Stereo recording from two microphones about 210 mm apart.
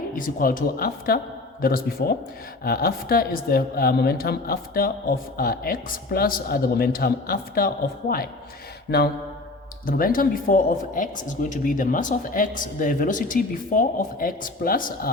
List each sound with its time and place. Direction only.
0.2 s speech: 40° left (ahead or behind)
8.9 s speech: 55° left (ahead or behind)